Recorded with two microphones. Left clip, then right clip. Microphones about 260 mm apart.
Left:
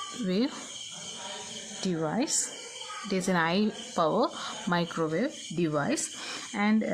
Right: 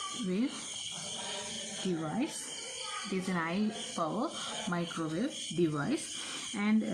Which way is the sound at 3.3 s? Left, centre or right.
Left.